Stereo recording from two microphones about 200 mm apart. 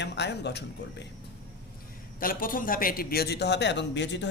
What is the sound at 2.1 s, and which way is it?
A man's voice, 45° left (ahead or behind).